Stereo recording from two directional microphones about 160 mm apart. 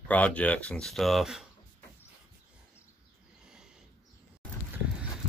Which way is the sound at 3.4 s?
5° right (ahead or behind).